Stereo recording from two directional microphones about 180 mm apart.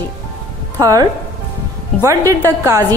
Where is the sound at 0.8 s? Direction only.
20° right (ahead or behind).